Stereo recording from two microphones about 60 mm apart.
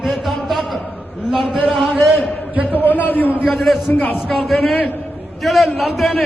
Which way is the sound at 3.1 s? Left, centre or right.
Left.